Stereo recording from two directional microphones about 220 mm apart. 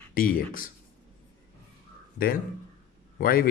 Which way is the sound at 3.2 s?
40° left (ahead or behind).